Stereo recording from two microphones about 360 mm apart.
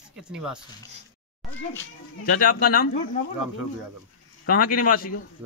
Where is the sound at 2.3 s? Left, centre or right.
Left.